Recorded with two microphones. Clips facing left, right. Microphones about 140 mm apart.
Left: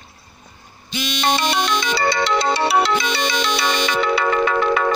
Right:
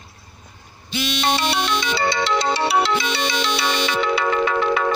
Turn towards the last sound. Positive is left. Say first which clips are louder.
# left 2 dB
turn(degrees=50)  # may be behind; listen again after turning